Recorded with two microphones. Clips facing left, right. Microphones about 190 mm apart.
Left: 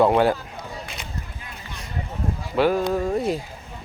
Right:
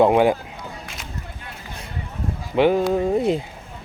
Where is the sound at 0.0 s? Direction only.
15° right (ahead or behind).